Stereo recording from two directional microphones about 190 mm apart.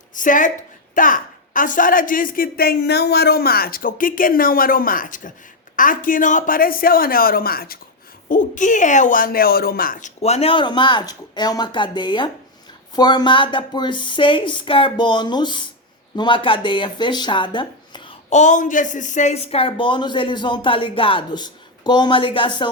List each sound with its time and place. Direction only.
0.1 s a woman's voice: 45° left (ahead or behind)
10.2 s speech: 35° left (ahead or behind)
18.3 s speech: 40° left (ahead or behind)